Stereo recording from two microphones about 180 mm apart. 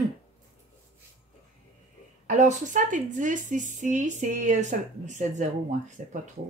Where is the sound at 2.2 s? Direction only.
40° right (ahead or behind).